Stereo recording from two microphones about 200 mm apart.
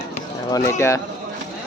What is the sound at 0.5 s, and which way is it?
Speech, 15° left (ahead or behind).